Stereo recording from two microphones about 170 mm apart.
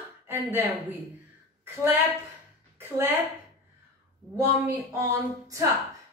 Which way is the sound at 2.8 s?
15° right (ahead or behind).